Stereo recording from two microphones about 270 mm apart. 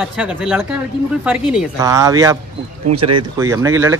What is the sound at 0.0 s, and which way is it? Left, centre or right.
Speech, centre.